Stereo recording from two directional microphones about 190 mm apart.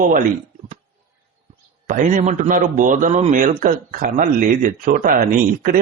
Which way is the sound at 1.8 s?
40° right (ahead or behind).